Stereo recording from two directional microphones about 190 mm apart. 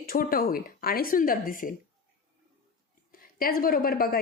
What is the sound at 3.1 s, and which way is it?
A woman's voice, 50° left (ahead or behind).